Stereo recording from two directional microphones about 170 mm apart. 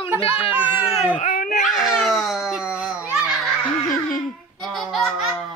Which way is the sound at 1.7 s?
Centre (ahead or behind).